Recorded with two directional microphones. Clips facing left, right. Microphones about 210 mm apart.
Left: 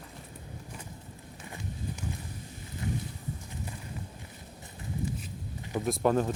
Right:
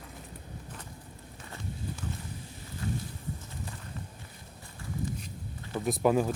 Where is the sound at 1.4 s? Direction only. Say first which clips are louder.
Even; 15° left (ahead or behind).